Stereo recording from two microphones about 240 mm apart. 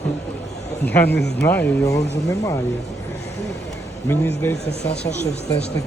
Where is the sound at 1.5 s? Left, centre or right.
Centre.